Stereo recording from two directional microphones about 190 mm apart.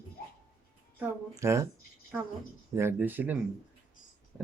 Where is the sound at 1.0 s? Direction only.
15° right (ahead or behind).